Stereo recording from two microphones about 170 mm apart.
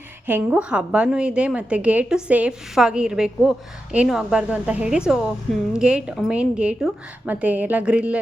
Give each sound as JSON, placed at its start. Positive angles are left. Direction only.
{"t": 0.3, "sound": "a woman's voice", "side_deg": -10}